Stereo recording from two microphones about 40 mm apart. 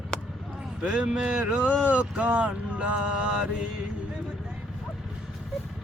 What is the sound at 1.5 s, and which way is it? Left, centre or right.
Vehicle, right.